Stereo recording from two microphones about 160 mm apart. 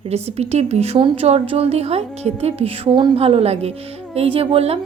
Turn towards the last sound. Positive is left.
turn(degrees=-40)  # may be behind; listen again after turning